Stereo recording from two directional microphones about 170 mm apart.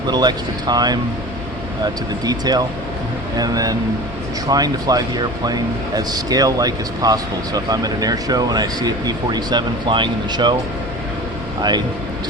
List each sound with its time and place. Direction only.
0.1 s speech: 25° right (ahead or behind)